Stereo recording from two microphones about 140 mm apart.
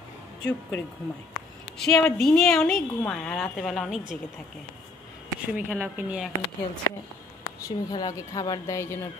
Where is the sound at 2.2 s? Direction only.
5° left (ahead or behind).